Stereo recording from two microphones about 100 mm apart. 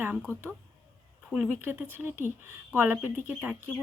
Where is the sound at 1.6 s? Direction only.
20° right (ahead or behind).